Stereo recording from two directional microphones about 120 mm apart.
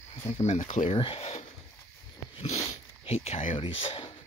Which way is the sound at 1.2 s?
65° left (ahead or behind).